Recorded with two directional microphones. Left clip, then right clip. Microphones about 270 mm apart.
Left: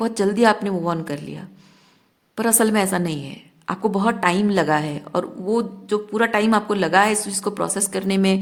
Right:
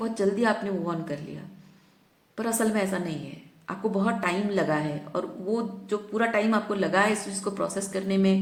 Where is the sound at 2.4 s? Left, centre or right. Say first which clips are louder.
Left 8 dB; left.